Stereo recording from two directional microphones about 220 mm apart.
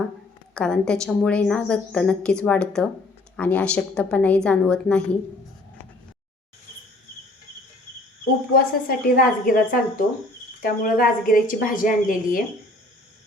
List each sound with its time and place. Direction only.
0.5 s a woman's voice: 5° left (ahead or behind)
8.5 s a woman's voice: 40° left (ahead or behind)